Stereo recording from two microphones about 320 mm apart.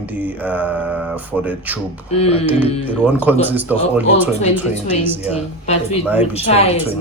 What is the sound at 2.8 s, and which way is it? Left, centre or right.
Speech, centre.